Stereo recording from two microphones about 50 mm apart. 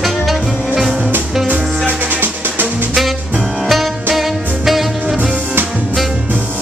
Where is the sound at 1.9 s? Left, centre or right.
Right.